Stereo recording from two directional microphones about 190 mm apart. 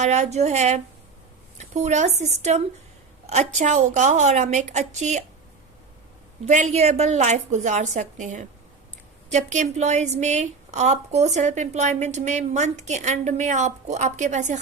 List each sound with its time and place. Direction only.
0.0 s a woman's voice: 35° right (ahead or behind)
6.4 s a woman's voice: 40° right (ahead or behind)